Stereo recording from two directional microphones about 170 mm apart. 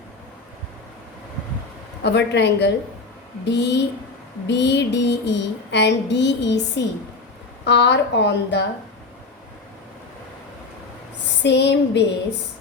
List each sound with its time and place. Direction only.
2.0 s speech: 90° left
3.4 s female singing: 85° left
11.4 s female singing: 90° left